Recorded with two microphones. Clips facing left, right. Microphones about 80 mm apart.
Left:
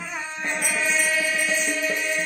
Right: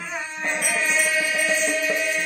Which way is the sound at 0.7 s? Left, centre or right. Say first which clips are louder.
Right 1 dB; right.